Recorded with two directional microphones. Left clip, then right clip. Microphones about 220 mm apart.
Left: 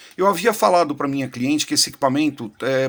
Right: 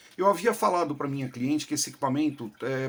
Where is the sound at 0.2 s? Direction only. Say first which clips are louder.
Left 6 dB; 35° left (ahead or behind).